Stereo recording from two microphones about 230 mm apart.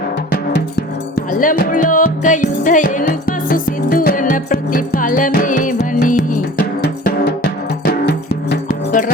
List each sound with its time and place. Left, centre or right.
0.3 s music: left
7.9 s music: left